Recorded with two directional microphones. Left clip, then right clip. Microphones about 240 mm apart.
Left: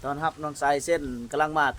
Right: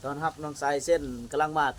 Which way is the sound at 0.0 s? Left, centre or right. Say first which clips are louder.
Left 3 dB; left.